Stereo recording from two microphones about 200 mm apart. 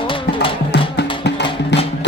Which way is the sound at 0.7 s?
55° left (ahead or behind).